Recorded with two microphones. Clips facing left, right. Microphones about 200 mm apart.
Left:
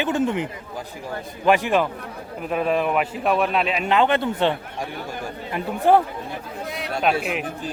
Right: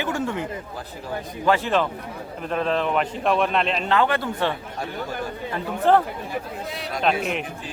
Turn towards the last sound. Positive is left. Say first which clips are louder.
# left 1 dB
turn(degrees=5)  # may be behind; listen again after turning